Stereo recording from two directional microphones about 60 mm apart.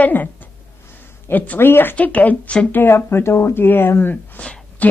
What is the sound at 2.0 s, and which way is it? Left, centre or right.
Speech, left.